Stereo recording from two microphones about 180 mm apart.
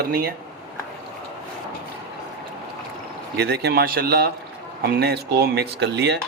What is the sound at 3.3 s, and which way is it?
A man's voice, 60° right (ahead or behind).